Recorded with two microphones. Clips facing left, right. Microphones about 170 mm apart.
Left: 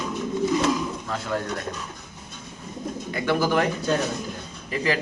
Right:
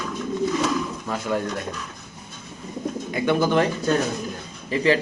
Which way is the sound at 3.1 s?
20° right (ahead or behind).